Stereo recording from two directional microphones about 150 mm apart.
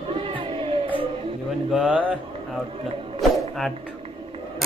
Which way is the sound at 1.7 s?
5° right (ahead or behind).